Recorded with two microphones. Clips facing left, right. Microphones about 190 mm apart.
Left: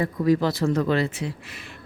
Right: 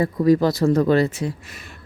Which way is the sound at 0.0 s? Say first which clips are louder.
Right 4 dB; 40° right (ahead or behind).